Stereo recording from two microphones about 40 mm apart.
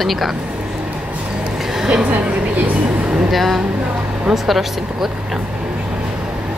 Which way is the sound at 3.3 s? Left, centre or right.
Centre.